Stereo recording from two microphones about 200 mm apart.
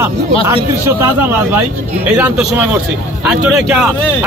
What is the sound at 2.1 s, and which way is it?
A man's voice, 10° right (ahead or behind).